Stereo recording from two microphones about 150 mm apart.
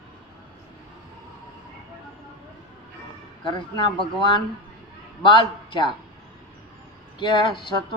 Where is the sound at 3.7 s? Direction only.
30° left (ahead or behind).